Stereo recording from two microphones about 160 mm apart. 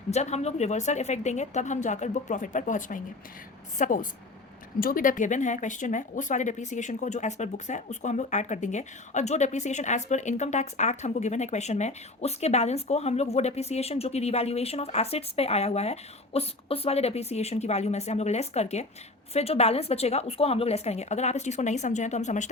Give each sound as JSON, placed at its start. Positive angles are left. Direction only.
{"t": 0.1, "sound": "a woman's voice", "side_deg": 45}